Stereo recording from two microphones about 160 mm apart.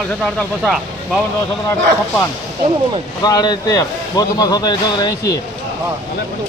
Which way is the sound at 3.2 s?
25° left (ahead or behind).